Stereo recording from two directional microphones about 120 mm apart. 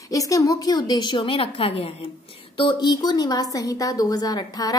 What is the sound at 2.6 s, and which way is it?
A woman's voice, 40° left (ahead or behind).